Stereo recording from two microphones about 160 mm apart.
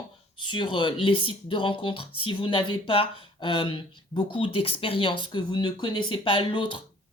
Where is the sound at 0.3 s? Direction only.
30° left (ahead or behind).